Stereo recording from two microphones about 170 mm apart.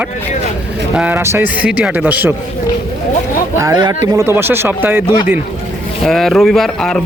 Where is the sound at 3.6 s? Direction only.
20° right (ahead or behind).